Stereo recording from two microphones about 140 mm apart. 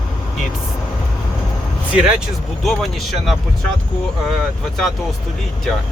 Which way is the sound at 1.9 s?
10° right (ahead or behind).